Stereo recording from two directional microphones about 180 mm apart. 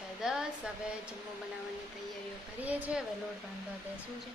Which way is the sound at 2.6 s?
10° right (ahead or behind).